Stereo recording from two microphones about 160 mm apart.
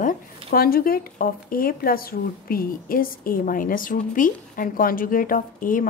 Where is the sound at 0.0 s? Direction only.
60° left (ahead or behind).